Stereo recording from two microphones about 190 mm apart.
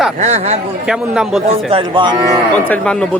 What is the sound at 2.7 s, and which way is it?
Speech, 5° left (ahead or behind).